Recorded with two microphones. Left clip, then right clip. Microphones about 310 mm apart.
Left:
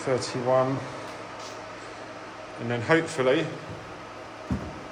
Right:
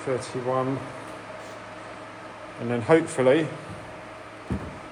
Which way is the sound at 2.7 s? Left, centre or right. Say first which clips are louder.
Right 3 dB; centre.